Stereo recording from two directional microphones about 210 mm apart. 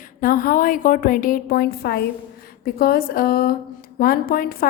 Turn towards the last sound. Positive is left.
turn(degrees=45)  # may be behind; listen again after turning